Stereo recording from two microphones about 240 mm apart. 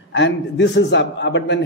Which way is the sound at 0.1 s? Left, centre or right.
Left.